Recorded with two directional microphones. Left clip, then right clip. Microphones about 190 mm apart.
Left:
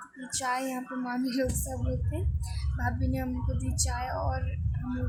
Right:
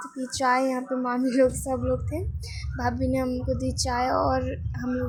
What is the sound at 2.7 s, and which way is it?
A woman's voice, 20° right (ahead or behind).